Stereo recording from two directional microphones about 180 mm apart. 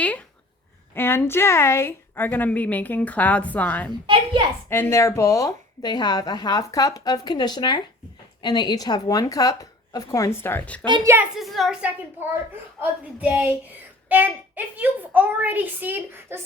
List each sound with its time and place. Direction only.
0.0 s a sound: 5° left (ahead or behind)
0.9 s a woman's voice: 15° left (ahead or behind)
4.0 s a child's voice: 30° right (ahead or behind)
4.7 s a woman's voice: 15° left (ahead or behind)
10.8 s a woman's voice: 25° right (ahead or behind)
11.3 s a woman's voice: centre (ahead or behind)